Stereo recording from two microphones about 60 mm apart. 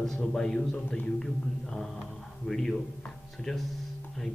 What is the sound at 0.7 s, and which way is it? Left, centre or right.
Speech, left.